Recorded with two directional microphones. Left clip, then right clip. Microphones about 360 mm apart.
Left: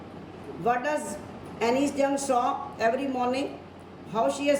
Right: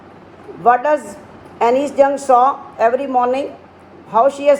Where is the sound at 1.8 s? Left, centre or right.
Centre.